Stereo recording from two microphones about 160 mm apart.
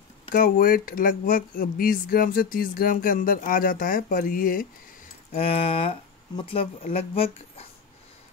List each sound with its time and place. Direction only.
0.3 s speech: 65° left (ahead or behind)
5.3 s speech: 35° left (ahead or behind)